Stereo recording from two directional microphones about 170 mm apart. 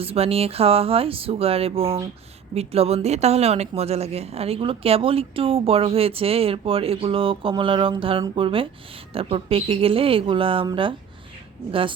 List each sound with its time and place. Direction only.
0.0 s speech: 35° right (ahead or behind)